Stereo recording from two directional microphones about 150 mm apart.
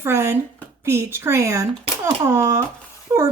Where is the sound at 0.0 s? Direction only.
15° right (ahead or behind).